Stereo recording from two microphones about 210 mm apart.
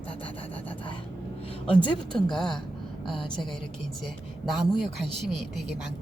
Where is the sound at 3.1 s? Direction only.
25° left (ahead or behind).